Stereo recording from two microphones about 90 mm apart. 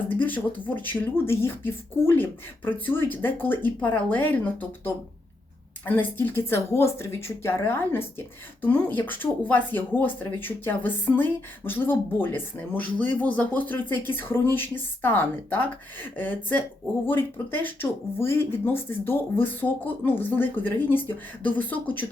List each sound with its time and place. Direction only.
0.1 s speech: 20° left (ahead or behind)
5.8 s speech: 20° left (ahead or behind)